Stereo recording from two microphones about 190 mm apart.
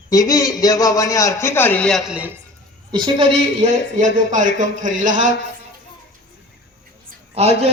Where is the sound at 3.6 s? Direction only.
40° right (ahead or behind).